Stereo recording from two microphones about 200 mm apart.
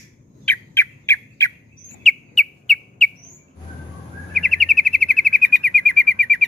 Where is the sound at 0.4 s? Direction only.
10° left (ahead or behind).